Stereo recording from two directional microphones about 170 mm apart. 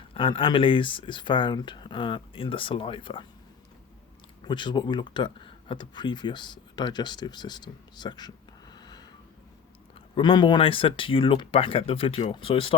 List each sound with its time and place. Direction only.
0.1 s speech: 30° left (ahead or behind)
4.4 s speech: 25° left (ahead or behind)
8.7 s a sound: 25° left (ahead or behind)
10.2 s speech: 30° left (ahead or behind)